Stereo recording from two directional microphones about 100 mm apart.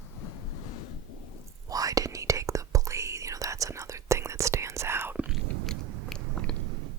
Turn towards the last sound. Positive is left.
turn(degrees=5)  # may be behind; listen again after turning